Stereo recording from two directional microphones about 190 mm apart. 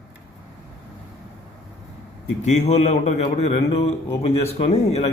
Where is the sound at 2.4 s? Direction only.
35° left (ahead or behind).